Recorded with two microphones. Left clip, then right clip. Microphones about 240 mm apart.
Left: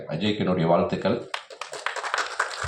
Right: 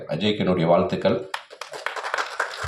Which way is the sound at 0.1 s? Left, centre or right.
Right.